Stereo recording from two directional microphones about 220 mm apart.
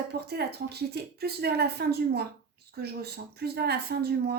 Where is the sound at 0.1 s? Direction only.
45° right (ahead or behind).